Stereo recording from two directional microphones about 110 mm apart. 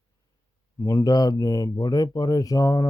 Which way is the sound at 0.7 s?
30° left (ahead or behind).